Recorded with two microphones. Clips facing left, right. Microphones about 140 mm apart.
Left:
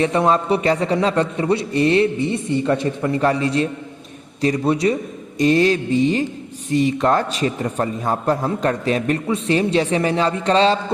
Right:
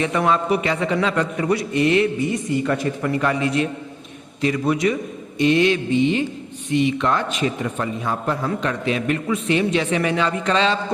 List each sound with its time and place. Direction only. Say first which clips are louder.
0.0 s a man's voice: left 3 dB; 30° left (ahead or behind)